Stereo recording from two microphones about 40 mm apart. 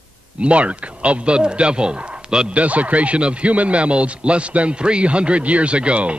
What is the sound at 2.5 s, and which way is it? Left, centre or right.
Speech, right.